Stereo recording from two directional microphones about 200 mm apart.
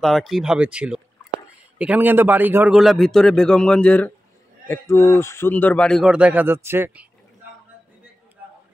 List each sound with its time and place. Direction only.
0.0 s a man's voice: centre (ahead or behind)